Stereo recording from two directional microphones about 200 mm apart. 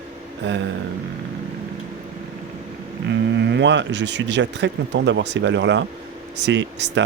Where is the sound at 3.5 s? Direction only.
60° right (ahead or behind).